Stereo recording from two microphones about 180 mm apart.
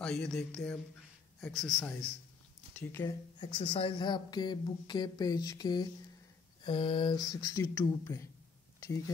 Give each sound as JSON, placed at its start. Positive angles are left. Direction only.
{"t": 0.0, "sound": "speech", "side_deg": 5}
{"t": 3.3, "sound": "speech", "side_deg": 25}